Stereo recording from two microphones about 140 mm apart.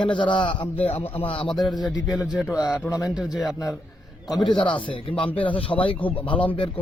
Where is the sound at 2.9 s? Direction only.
25° left (ahead or behind).